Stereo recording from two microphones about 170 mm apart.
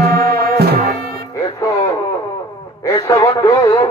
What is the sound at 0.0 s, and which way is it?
Music, 65° right (ahead or behind).